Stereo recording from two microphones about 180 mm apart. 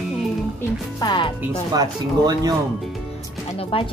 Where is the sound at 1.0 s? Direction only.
25° left (ahead or behind).